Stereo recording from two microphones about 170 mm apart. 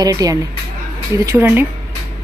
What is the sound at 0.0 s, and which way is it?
Speech, 20° right (ahead or behind).